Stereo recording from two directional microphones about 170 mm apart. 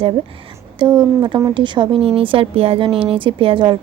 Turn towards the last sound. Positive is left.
turn(degrees=-30)  # may be behind; listen again after turning